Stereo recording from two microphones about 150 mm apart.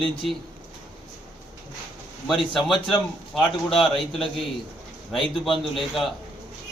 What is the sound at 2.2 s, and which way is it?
A man's voice, centre (ahead or behind).